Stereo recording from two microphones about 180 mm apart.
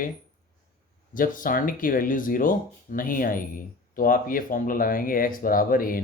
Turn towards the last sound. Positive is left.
turn(degrees=50)  # may be behind; listen again after turning